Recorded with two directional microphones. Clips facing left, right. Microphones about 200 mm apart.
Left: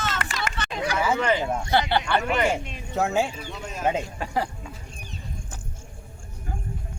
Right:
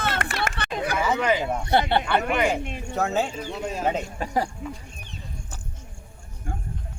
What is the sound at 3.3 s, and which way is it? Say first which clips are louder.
Speech: right 5 dB; 35° right (ahead or behind).